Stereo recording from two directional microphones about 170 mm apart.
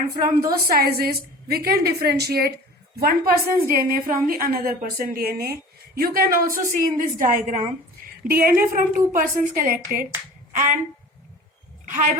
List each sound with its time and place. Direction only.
0.4 s a woman's voice: 65° right (ahead or behind)
11.9 s speech: 50° right (ahead or behind)